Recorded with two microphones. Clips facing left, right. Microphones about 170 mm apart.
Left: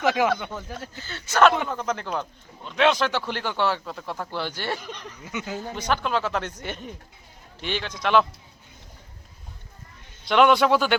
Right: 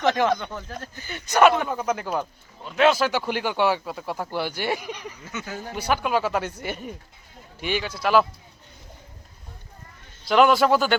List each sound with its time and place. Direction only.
0.0 s speech: 5° left (ahead or behind)
0.9 s speech: 15° right (ahead or behind)
5.2 s speech: 15° left (ahead or behind)
5.7 s speech: 10° right (ahead or behind)
10.2 s a man's voice: centre (ahead or behind)